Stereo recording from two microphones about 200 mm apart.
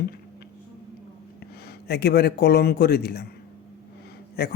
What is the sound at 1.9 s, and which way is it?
A man's voice, 50° left (ahead or behind).